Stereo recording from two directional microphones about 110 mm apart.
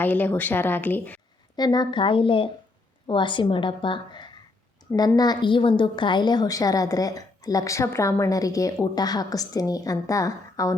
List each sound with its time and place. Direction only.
0.0 s speech: 15° left (ahead or behind)
1.5 s a woman's voice: 40° left (ahead or behind)